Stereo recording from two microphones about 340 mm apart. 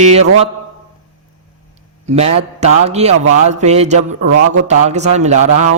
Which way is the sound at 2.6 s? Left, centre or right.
Centre.